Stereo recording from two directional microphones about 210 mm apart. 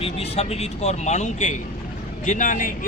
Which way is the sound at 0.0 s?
30° left (ahead or behind).